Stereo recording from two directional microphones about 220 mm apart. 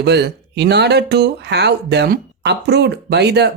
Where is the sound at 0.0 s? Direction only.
50° right (ahead or behind).